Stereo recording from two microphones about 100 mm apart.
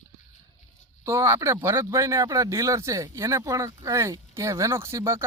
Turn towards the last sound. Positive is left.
turn(degrees=-25)  # may be behind; listen again after turning